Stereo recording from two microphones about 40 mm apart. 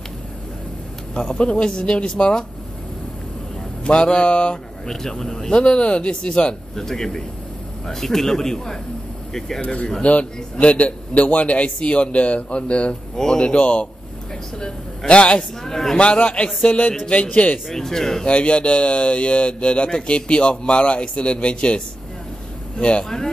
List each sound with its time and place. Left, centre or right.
1.3 s a man's voice: left
3.8 s a man's voice: left
4.8 s speech: centre
5.5 s a man's voice: left
6.7 s speech: centre
9.6 s a man's voice: left
13.1 s a man's voice: centre
15.6 s speech: centre
16.0 s a man's voice: left
17.7 s speech: centre
18.2 s a man's voice: left
23.0 s speech: centre